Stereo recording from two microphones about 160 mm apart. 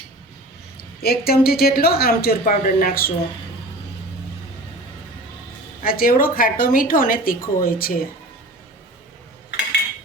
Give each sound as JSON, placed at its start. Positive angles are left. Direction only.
{"t": 0.8, "sound": "a woman's voice", "side_deg": 75}
{"t": 5.8, "sound": "speech", "side_deg": 65}